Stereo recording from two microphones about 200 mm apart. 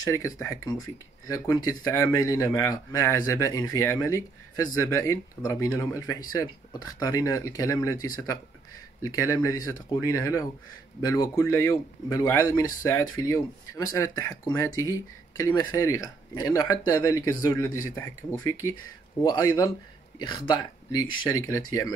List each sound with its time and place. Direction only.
0.0 s speech: 15° left (ahead or behind)